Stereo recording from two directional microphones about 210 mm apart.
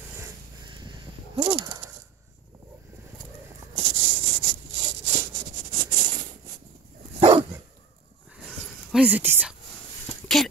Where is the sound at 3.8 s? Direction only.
25° right (ahead or behind).